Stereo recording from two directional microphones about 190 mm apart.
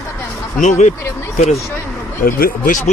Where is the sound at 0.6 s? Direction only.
40° left (ahead or behind).